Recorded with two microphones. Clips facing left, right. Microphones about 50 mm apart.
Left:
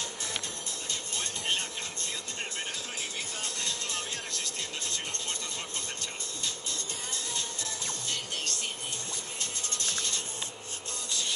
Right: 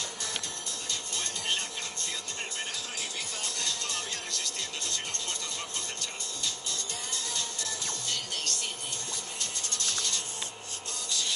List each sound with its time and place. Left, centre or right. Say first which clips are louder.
1.1 s music: left 1 dB; left
3.4 s music: right 1 dB; left
7.3 s music: even; left
11.1 s rub: right 1 dB; left